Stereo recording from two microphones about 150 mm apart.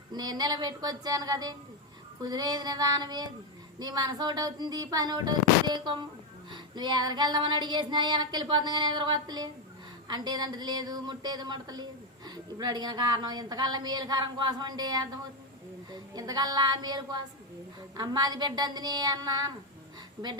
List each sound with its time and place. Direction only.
0.1 s child singing: 25° right (ahead or behind)
15.9 s a woman's voice: 25° right (ahead or behind)
17.9 s child singing: 25° right (ahead or behind)